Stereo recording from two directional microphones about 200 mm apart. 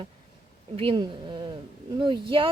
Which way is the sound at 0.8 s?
25° right (ahead or behind).